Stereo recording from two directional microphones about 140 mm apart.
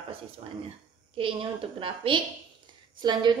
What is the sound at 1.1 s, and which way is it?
A woman's voice, 40° right (ahead or behind).